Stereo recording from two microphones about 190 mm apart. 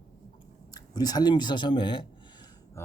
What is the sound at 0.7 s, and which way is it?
Speech, 20° left (ahead or behind).